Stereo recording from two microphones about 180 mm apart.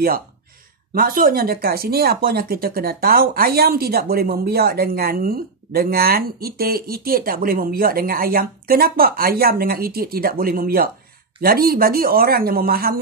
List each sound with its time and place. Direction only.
0.9 s speech: 55° right (ahead or behind)